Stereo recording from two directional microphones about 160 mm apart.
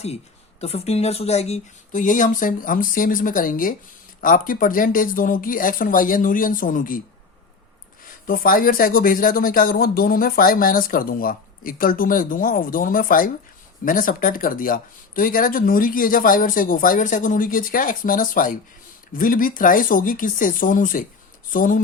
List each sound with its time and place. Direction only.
0.6 s speech: 40° left (ahead or behind); by 7.0 s 60° left (ahead or behind)
8.3 s speech: 65° left (ahead or behind)